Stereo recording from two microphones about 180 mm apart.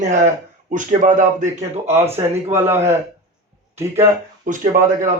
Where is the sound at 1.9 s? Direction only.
15° right (ahead or behind).